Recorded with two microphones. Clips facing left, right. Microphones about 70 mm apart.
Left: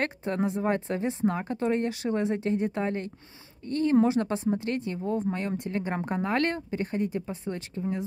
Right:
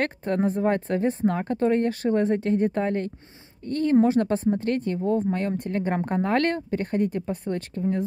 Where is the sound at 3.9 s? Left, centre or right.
Right.